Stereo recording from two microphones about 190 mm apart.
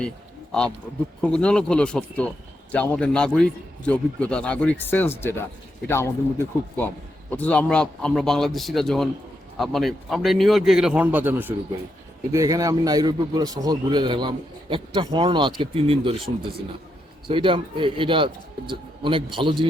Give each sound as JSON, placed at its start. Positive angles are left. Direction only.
{"t": 1.2, "sound": "a man's voice", "side_deg": 5}
{"t": 17.2, "sound": "a man's voice", "side_deg": -25}